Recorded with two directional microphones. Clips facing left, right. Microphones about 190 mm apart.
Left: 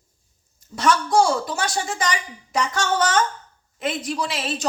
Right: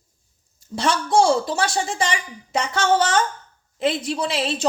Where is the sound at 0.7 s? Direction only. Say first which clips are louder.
Even; 25° right (ahead or behind).